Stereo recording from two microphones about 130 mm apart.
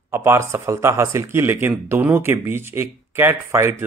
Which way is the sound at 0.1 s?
20° right (ahead or behind).